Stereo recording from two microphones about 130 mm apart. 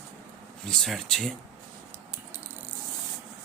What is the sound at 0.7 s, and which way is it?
Speech, centre (ahead or behind).